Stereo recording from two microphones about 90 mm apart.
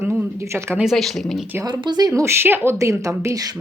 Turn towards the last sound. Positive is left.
turn(degrees=-35)  # may be behind; listen again after turning